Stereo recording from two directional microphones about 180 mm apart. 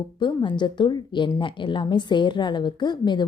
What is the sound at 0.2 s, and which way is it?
A woman's voice, 25° left (ahead or behind).